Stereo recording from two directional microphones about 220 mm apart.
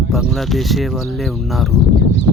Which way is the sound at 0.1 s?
Centre (ahead or behind).